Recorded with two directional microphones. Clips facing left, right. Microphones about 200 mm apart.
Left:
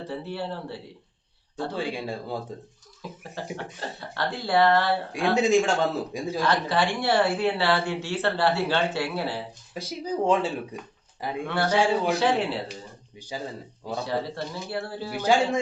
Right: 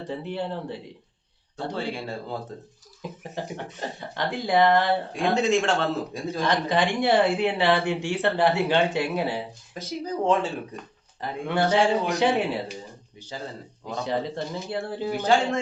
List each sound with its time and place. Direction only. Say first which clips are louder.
0.1 s speech: right 3 dB; 15° right (ahead or behind)
1.7 s a man's voice: even; 15° left (ahead or behind)
3.3 s speech: even; 15° right (ahead or behind)
5.5 s a man's voice: left 1 dB; 15° left (ahead or behind)
6.4 s speech: right 1 dB; 15° right (ahead or behind)
9.9 s a man's voice: even; 10° left (ahead or behind)
11.4 s speech: right 2 dB; 15° right (ahead or behind)
13.1 s a man's voice: left 2 dB; 15° left (ahead or behind)
14.0 s speech: right 2 dB; 20° right (ahead or behind)